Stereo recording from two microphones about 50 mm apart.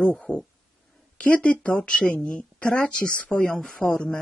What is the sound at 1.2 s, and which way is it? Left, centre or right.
Speech, left.